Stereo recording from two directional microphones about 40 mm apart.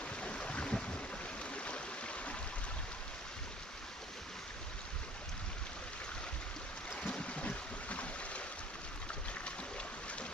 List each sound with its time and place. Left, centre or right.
0.2 s boat: left
7.0 s boat: left